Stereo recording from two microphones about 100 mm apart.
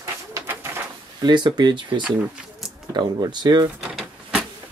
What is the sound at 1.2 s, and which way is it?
Speech, 50° right (ahead or behind).